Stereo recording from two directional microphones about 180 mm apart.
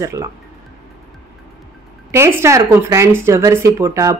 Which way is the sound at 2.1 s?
15° right (ahead or behind).